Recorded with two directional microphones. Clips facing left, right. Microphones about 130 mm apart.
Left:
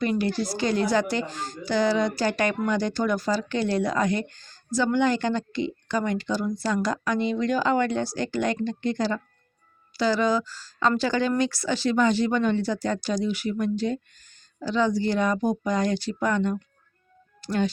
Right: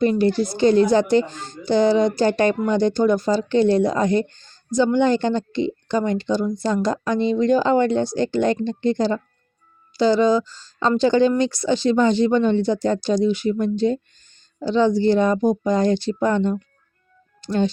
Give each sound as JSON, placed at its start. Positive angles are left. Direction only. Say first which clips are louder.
{"t": 0.0, "sound": "a woman's voice", "louder": "right 7 dB", "side_deg": -25}